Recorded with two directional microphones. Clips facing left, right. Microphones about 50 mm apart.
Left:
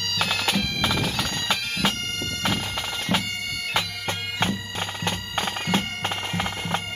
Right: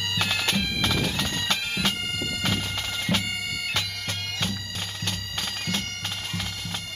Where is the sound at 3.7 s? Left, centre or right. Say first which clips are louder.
Left 3 dB; left.